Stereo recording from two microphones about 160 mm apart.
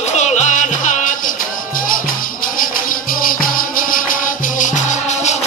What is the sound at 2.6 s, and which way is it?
Music, 60° left (ahead or behind).